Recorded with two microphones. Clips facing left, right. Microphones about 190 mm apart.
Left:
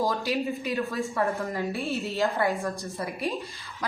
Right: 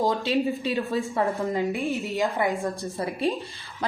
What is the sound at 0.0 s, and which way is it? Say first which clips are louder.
Speech: right 3 dB; 20° right (ahead or behind).